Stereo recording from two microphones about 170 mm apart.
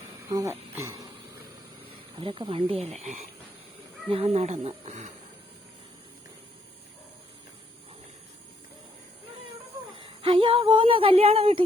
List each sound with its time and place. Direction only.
0.3 s speech: 20° right (ahead or behind)
2.1 s speech: 30° right (ahead or behind)
10.0 s speech: 30° right (ahead or behind)